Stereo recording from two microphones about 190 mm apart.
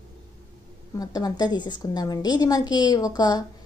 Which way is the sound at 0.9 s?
20° left (ahead or behind).